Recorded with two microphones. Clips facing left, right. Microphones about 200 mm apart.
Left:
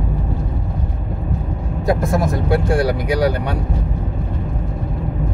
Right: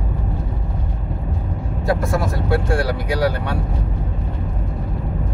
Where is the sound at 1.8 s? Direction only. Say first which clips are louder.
Left 3 dB; 20° left (ahead or behind).